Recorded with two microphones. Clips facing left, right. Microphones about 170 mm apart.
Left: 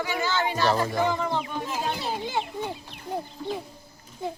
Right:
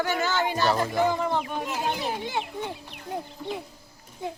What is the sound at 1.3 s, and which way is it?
Speech, 15° right (ahead or behind).